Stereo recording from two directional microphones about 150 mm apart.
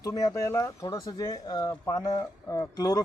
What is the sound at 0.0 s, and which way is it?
Speech, 25° left (ahead or behind).